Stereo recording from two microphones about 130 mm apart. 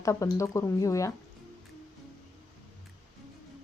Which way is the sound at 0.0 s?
25° left (ahead or behind).